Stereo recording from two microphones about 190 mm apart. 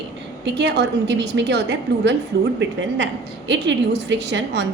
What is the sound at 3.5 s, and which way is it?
A woman's voice, 70° right (ahead or behind).